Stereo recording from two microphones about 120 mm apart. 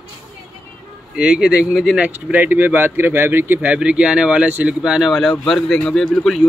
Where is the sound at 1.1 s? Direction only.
10° right (ahead or behind).